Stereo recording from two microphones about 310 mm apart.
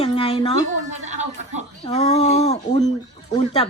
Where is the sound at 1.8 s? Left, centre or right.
Centre.